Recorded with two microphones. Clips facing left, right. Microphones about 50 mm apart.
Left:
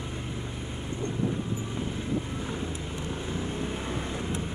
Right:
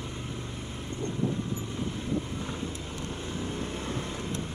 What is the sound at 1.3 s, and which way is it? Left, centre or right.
Vehicle, centre.